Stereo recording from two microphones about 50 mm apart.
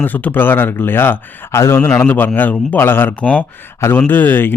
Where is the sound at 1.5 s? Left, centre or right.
Left.